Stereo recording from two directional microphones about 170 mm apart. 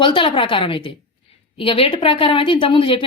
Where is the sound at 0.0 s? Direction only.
30° left (ahead or behind).